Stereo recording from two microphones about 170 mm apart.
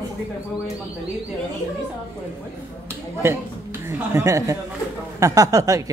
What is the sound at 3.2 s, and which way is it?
Speech, 15° right (ahead or behind).